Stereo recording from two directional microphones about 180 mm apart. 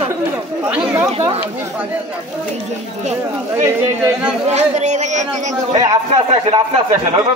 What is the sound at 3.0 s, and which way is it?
Speech, 40° right (ahead or behind).